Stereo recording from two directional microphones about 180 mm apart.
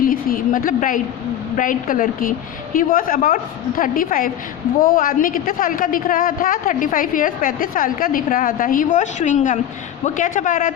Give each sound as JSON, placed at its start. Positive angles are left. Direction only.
{"t": 0.0, "sound": "a woman's voice", "side_deg": 50}